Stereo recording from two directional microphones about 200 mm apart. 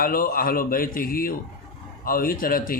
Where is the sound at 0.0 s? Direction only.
45° left (ahead or behind).